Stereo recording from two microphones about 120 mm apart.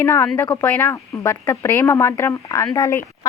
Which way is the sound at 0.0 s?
20° left (ahead or behind).